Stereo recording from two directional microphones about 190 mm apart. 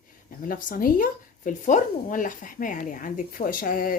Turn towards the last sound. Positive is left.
turn(degrees=50)  # may be behind; listen again after turning